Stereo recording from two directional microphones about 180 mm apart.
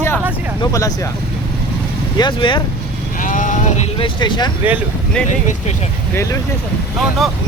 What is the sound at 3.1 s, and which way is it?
Vehicle, 50° left (ahead or behind).